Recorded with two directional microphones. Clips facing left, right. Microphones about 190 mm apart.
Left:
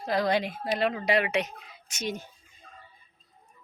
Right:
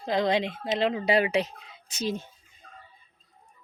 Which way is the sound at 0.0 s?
25° right (ahead or behind).